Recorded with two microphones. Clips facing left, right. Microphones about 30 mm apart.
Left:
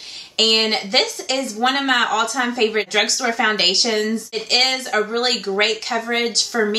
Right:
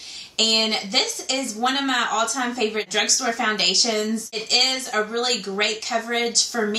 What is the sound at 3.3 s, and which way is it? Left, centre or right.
Speech, left.